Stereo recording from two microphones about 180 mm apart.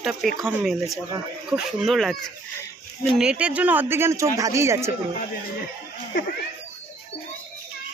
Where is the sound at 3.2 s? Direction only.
5° right (ahead or behind).